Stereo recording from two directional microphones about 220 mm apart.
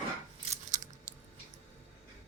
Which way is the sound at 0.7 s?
35° right (ahead or behind).